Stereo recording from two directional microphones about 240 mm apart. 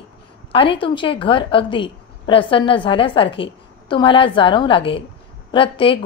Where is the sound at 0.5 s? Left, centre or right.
Left.